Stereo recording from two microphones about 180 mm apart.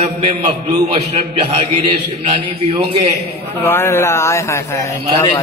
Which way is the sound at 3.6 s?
15° left (ahead or behind).